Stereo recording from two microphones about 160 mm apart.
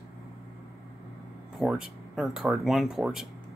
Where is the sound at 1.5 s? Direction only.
5° right (ahead or behind).